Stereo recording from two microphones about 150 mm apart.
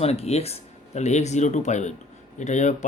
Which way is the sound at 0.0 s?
45° left (ahead or behind).